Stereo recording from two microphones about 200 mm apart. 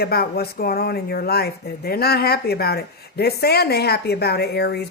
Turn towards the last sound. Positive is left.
turn(degrees=55)  # may be behind; listen again after turning